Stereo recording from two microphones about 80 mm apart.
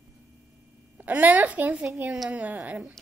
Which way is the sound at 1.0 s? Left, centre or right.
Centre.